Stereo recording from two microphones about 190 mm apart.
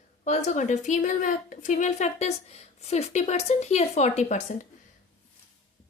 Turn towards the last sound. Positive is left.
turn(degrees=35)  # may be behind; listen again after turning